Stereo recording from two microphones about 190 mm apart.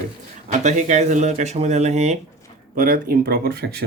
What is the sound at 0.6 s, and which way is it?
Speech, 40° right (ahead or behind).